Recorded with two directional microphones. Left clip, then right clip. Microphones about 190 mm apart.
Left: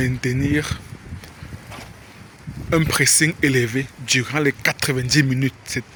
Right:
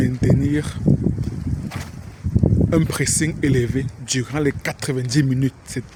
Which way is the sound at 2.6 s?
15° right (ahead or behind).